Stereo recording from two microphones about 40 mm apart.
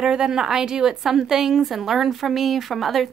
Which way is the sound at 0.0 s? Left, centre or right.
Centre.